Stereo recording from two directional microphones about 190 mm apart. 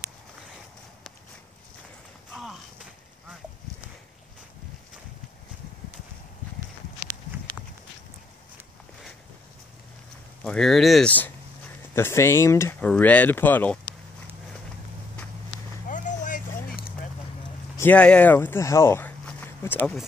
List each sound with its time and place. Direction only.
2.3 s a sound: centre (ahead or behind)
10.4 s speech: 5° left (ahead or behind)
15.9 s vehicle: 40° left (ahead or behind)
17.7 s speech: 10° left (ahead or behind)